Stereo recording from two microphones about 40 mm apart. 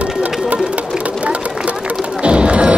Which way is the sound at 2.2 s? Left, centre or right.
Right.